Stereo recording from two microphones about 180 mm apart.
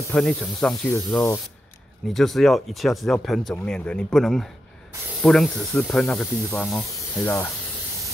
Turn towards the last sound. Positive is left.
turn(degrees=10)  # may be behind; listen again after turning